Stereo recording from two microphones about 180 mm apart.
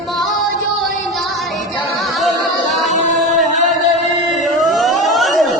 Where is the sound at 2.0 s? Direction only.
Centre (ahead or behind).